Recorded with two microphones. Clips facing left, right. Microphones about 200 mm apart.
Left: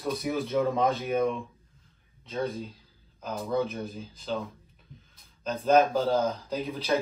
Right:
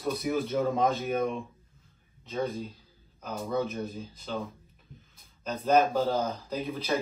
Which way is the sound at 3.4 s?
Centre (ahead or behind).